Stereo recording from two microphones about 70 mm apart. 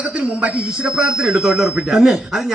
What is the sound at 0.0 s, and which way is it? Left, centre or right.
A man's voice, centre.